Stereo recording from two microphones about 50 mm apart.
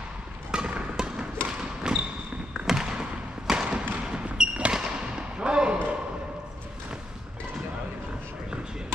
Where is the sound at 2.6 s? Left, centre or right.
Centre.